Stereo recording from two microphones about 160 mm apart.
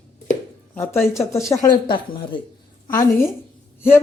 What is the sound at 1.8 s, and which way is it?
Speech, 30° left (ahead or behind).